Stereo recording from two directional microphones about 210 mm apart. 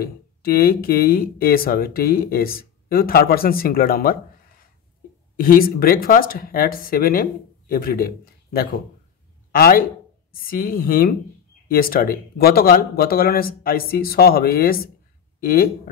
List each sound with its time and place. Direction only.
0.0 s speech: 45° left (ahead or behind)
9.5 s speech: 45° left (ahead or behind)